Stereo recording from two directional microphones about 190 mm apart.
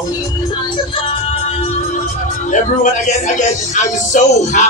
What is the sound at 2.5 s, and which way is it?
Speech, 40° left (ahead or behind).